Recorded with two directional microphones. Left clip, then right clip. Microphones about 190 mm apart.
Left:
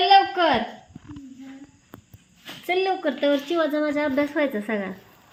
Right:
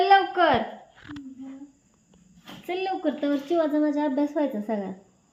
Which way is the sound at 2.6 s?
35° left (ahead or behind).